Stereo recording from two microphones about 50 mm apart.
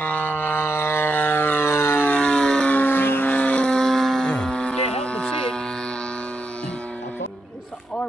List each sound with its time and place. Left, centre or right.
0.0 s siren: left
1.7 s siren: left
2.0 s siren: left
2.7 s vehicle: left
3.3 s vehicle: left; by 4.3 s centre
4.3 s a sound: centre